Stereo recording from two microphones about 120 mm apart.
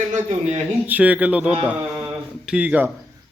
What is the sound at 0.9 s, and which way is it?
Speech, 15° right (ahead or behind).